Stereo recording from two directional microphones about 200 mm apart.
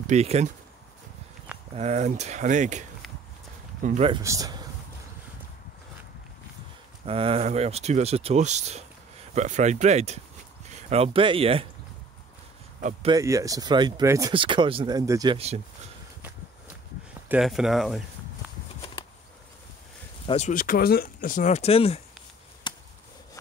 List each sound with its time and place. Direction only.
0.0 s speech: 35° right (ahead or behind)
1.8 s speech: 35° right (ahead or behind)
3.8 s speech: 35° right (ahead or behind)
4.1 s speech: 15° right (ahead or behind)
7.1 s speech: 30° right (ahead or behind)
13.1 s speech: 15° right (ahead or behind)
15.3 s speech: 30° right (ahead or behind)
17.3 s speech: centre (ahead or behind)
20.2 s speech: 35° left (ahead or behind)
22.7 s chop: 20° left (ahead or behind)